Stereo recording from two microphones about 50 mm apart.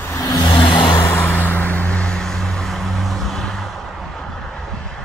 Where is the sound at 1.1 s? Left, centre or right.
Left.